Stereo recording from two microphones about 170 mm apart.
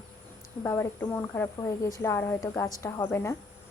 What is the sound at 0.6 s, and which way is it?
A woman's voice, 15° left (ahead or behind).